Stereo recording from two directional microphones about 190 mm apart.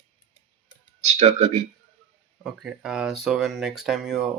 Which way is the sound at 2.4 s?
Centre (ahead or behind).